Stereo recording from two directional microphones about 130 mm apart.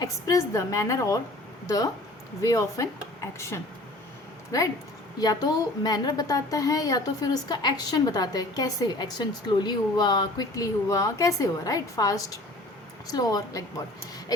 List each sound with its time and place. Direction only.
0.0 s a woman's voice: 25° left (ahead or behind)